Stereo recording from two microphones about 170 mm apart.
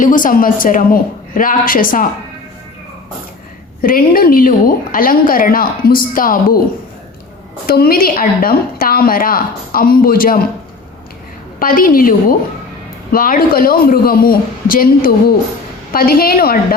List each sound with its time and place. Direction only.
0.0 s a woman's voice: 50° left (ahead or behind)
3.8 s a woman's voice: 60° left (ahead or behind)
7.7 s a woman's voice: 60° left (ahead or behind)
11.6 s a woman's voice: 55° left (ahead or behind)